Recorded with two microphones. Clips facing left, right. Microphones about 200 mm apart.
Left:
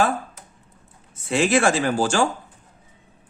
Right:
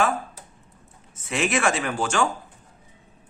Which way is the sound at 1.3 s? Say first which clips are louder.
Left 5 dB; 30° left (ahead or behind).